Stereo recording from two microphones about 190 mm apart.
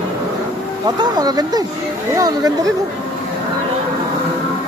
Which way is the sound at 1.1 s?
20° right (ahead or behind).